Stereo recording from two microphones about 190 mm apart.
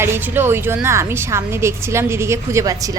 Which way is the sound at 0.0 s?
10° right (ahead or behind).